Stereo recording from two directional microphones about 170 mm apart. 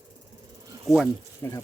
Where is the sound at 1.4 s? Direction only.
15° left (ahead or behind).